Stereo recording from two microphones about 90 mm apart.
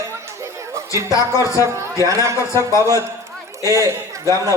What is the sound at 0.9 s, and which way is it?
A man's voice, 35° right (ahead or behind).